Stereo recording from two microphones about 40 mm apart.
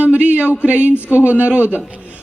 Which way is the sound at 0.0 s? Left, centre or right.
Right.